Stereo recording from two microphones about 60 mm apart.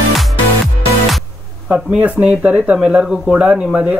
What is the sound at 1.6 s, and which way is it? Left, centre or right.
Speech, centre.